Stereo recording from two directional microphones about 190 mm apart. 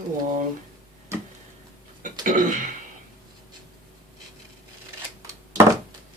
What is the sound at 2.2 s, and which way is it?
Speech, 45° right (ahead or behind).